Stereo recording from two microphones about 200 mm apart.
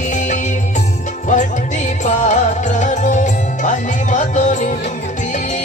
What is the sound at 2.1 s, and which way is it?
Music, 35° left (ahead or behind).